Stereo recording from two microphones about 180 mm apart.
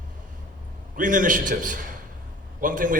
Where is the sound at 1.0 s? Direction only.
45° right (ahead or behind).